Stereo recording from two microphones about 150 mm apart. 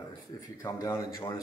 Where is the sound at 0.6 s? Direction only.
20° left (ahead or behind).